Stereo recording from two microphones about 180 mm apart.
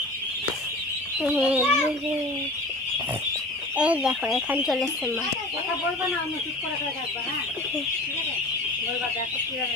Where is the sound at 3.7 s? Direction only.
5° right (ahead or behind).